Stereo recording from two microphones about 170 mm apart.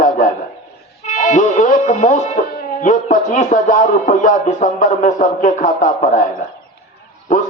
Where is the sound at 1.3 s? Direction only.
50° left (ahead or behind).